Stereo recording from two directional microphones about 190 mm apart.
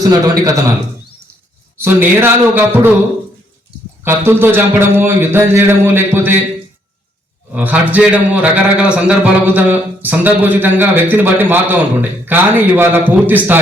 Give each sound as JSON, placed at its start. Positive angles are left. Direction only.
{"t": 0.0, "sound": "a man's voice", "side_deg": -20}
{"t": 1.8, "sound": "a man's voice", "side_deg": -10}
{"t": 4.0, "sound": "a man's voice", "side_deg": -10}
{"t": 7.5, "sound": "a man's voice", "side_deg": -10}